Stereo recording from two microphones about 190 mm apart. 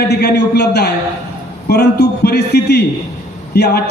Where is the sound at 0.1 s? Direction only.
60° left (ahead or behind).